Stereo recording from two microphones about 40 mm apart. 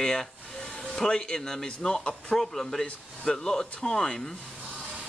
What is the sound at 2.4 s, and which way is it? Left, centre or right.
A man's voice, centre.